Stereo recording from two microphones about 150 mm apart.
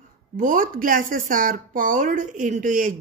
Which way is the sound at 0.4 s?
65° right (ahead or behind).